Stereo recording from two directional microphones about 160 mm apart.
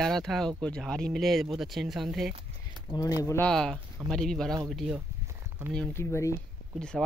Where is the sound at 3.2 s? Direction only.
20° left (ahead or behind).